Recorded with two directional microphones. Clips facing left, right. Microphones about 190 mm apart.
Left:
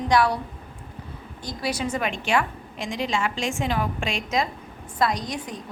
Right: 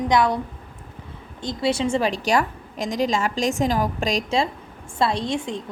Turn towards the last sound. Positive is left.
turn(degrees=-25)  # may be behind; listen again after turning